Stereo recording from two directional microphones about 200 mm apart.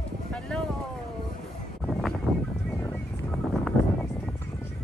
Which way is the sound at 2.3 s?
Centre (ahead or behind).